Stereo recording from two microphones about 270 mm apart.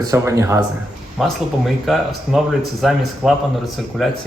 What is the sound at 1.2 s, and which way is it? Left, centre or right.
Speech, centre.